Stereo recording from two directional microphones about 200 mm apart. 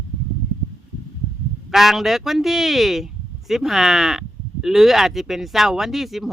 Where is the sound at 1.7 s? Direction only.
Centre (ahead or behind).